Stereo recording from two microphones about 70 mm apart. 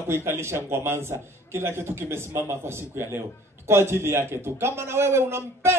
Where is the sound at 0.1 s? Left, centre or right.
Right.